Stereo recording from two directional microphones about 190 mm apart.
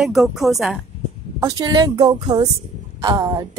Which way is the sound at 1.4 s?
20° right (ahead or behind).